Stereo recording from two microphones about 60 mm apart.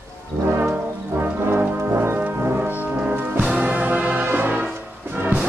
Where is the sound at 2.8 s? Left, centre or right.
Right.